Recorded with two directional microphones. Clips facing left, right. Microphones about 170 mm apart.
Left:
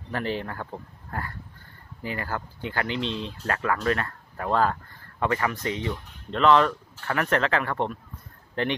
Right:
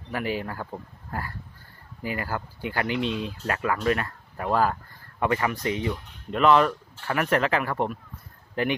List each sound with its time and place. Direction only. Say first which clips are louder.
0.1 s speech: even; 10° right (ahead or behind)